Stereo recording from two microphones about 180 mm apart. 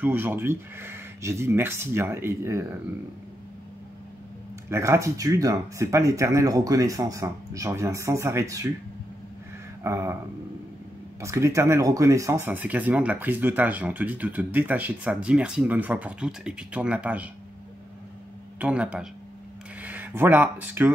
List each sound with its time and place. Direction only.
0.0 s speech: 10° right (ahead or behind)
4.6 s speech: 15° right (ahead or behind)
9.8 s speech: 15° right (ahead or behind)
11.1 s speech: 15° right (ahead or behind)
18.6 s speech: 5° right (ahead or behind)